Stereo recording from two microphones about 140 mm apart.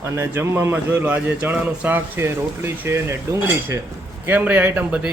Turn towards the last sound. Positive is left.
turn(degrees=-10)  # may be behind; listen again after turning